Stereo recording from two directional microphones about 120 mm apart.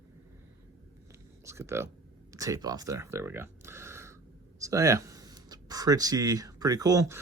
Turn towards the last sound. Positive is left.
turn(degrees=-25)  # may be behind; listen again after turning